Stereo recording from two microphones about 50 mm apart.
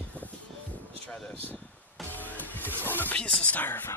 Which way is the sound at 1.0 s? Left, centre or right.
Left.